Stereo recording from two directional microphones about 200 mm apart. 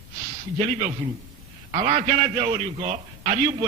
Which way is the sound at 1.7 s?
35° right (ahead or behind).